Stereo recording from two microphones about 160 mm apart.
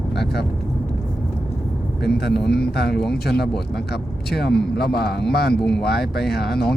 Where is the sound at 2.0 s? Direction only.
90° left.